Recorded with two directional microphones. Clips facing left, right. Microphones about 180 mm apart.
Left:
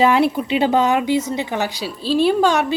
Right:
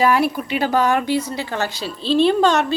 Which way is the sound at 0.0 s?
25° left (ahead or behind).